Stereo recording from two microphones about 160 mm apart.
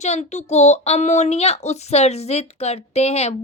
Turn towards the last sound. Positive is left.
turn(degrees=40)  # may be behind; listen again after turning